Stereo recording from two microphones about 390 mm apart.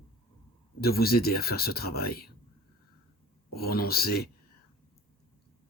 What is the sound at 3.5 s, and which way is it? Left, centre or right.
Speech, left.